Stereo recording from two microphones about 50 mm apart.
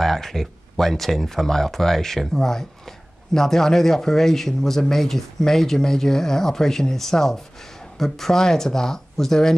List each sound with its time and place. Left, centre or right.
0.0 s speech: centre